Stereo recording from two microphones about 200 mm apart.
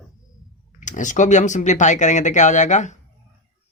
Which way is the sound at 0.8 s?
40° left (ahead or behind).